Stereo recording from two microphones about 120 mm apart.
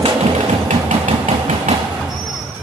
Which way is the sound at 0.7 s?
75° right (ahead or behind).